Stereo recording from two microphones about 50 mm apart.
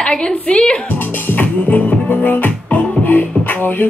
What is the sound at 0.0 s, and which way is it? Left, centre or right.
Speech, centre.